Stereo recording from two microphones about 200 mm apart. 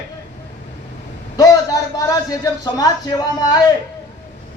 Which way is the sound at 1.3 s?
15° left (ahead or behind).